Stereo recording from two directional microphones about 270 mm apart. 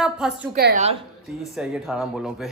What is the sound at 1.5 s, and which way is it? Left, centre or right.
Speech, centre.